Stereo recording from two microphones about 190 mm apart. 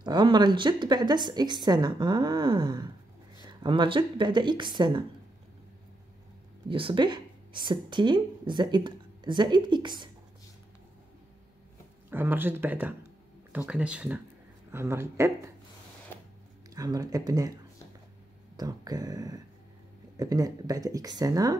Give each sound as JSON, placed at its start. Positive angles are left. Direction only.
{"t": 0.0, "sound": "speech", "side_deg": -25}
{"t": 6.7, "sound": "speech", "side_deg": -25}
{"t": 12.1, "sound": "speech", "side_deg": -10}
{"t": 16.7, "sound": "speech", "side_deg": -20}
{"t": 18.6, "sound": "speech", "side_deg": -20}